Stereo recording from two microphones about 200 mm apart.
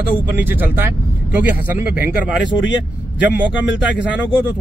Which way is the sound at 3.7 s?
60° left (ahead or behind).